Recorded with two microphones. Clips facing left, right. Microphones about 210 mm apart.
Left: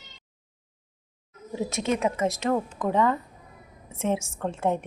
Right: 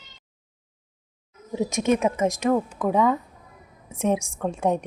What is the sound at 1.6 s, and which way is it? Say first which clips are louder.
A woman's voice: right 4 dB; 15° right (ahead or behind).